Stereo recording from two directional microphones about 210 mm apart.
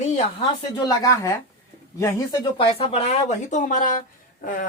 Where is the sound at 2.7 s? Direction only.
25° left (ahead or behind).